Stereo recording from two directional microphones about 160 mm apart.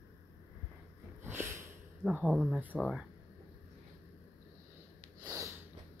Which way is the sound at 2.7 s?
5° left (ahead or behind).